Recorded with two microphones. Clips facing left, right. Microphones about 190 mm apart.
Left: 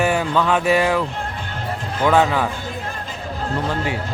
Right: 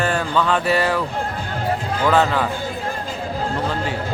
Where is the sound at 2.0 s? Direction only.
10° left (ahead or behind).